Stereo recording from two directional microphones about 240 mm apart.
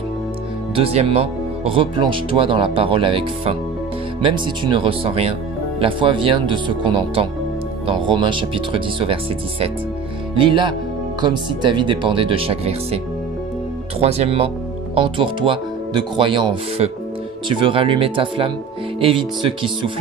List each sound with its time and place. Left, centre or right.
0.7 s speech: right